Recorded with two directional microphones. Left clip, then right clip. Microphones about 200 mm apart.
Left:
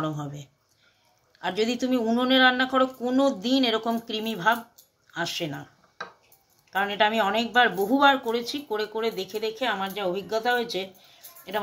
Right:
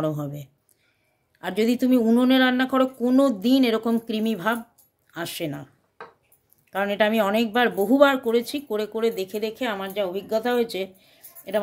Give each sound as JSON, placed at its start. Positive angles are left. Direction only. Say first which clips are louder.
{"t": 0.0, "sound": "speech", "louder": "right 4 dB", "side_deg": -65}
{"t": 6.7, "sound": "speech", "louder": "right 1 dB", "side_deg": -60}